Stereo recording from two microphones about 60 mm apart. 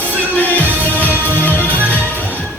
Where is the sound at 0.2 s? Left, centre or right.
Left.